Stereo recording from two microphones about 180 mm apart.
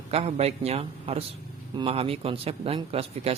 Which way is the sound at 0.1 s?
35° right (ahead or behind).